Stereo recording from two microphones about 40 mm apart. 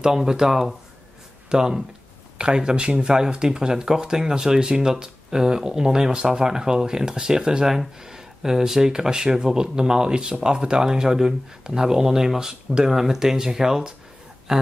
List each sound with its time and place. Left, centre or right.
0.0 s speech: centre